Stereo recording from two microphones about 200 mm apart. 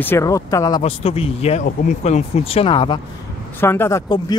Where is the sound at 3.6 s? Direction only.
10° left (ahead or behind).